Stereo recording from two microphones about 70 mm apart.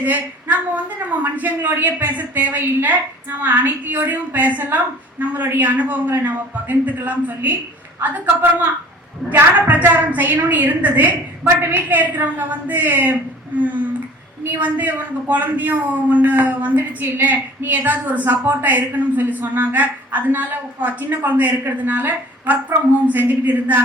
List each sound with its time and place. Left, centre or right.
0.0 s a man's voice: right
9.3 s a man's voice: right